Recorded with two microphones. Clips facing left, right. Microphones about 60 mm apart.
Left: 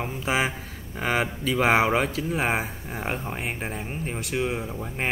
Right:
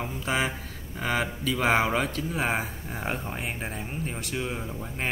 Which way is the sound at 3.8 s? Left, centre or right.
Centre.